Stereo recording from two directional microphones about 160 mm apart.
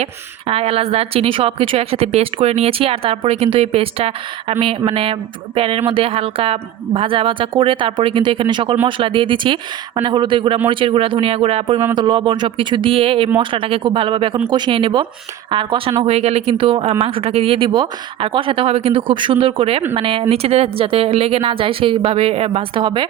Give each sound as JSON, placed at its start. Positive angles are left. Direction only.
{"t": 0.0, "sound": "a woman's voice", "side_deg": -40}